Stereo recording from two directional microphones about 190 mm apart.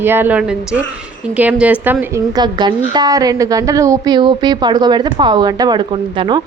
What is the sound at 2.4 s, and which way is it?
A woman's voice, 20° right (ahead or behind).